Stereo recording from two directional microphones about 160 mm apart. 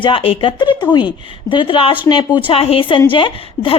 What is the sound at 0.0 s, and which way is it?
A woman's voice, 35° left (ahead or behind).